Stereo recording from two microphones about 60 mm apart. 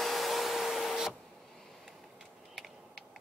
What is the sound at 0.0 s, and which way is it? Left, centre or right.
Printer, centre.